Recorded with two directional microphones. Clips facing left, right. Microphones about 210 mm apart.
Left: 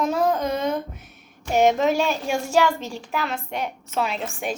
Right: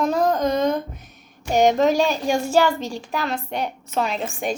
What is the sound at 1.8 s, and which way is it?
Speech, 40° right (ahead or behind).